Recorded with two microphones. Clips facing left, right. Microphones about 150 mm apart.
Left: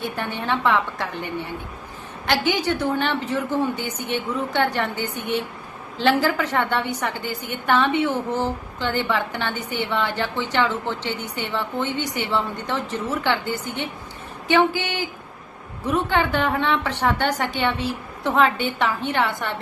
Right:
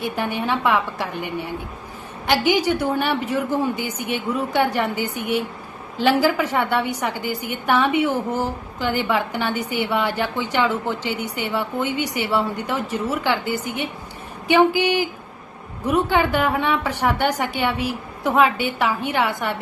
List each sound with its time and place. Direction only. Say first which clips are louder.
0.0 s a woman's voice: right 3 dB; 15° right (ahead or behind)